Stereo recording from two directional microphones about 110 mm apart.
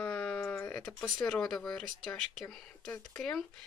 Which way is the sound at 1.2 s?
5° left (ahead or behind).